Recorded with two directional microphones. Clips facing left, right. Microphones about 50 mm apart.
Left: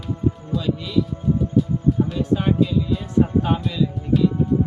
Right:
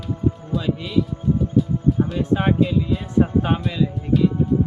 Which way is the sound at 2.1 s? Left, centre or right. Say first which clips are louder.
Right 1 dB; right.